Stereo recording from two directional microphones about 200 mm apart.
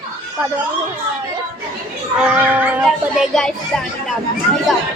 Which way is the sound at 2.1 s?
5° right (ahead or behind).